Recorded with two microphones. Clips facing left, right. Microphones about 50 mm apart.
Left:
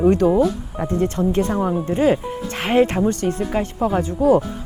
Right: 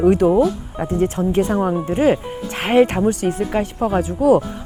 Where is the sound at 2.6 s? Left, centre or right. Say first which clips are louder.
Right 2 dB; right.